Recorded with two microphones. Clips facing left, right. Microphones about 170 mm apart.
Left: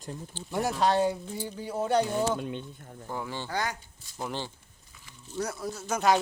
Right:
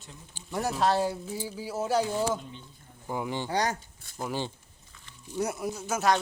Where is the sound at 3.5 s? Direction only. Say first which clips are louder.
Right 4 dB; 35° right (ahead or behind).